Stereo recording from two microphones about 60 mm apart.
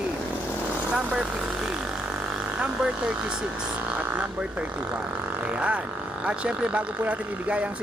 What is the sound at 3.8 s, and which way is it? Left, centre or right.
Speech, right.